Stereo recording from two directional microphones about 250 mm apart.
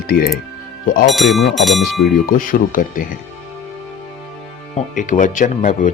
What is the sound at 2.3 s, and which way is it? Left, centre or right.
Speech, left.